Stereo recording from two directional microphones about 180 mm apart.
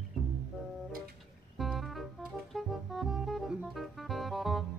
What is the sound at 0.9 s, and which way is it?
Music, 55° right (ahead or behind).